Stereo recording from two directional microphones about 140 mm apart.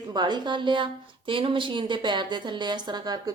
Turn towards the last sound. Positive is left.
turn(degrees=-30)  # may be behind; listen again after turning